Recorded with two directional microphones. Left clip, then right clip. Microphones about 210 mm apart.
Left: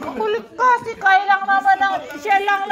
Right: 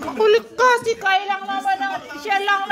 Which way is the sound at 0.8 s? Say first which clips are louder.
Left 3 dB; 30° right (ahead or behind).